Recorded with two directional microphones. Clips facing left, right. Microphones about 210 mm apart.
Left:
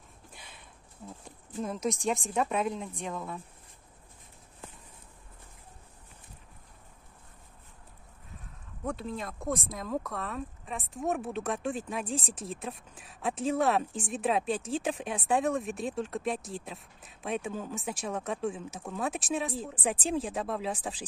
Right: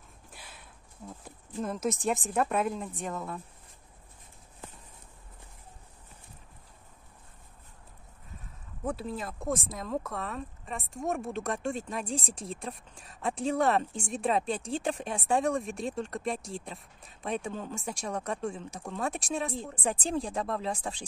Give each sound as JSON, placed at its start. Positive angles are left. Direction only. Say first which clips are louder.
{"t": 0.3, "sound": "a sound", "louder": "right 2 dB", "side_deg": -5}
{"t": 1.2, "sound": "speech", "louder": "right 1 dB", "side_deg": 0}
{"t": 8.8, "sound": "speech", "louder": "right 1 dB", "side_deg": -5}